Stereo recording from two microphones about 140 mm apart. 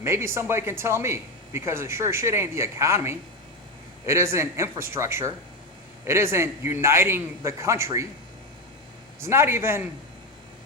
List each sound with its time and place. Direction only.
0.0 s speech: 20° right (ahead or behind)
9.2 s speech: 20° right (ahead or behind)